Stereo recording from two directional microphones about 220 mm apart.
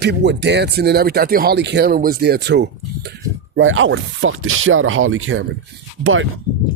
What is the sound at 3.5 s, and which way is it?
Speech, 60° right (ahead or behind).